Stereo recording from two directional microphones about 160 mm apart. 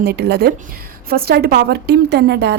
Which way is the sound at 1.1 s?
75° right (ahead or behind).